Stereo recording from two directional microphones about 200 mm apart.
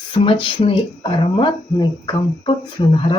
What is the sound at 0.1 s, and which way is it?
Speech, 25° left (ahead or behind).